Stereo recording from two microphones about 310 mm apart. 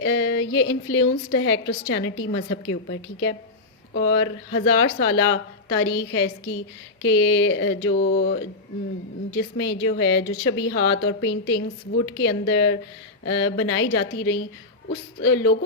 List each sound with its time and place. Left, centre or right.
0.0 s speech: left